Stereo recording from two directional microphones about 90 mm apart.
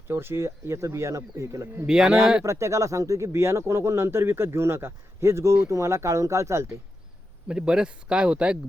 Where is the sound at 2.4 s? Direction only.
35° right (ahead or behind).